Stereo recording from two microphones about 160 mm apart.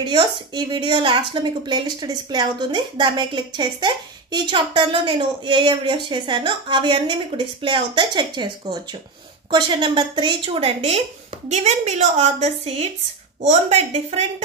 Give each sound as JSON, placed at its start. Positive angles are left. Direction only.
{"t": 0.0, "sound": "a woman's voice", "side_deg": -30}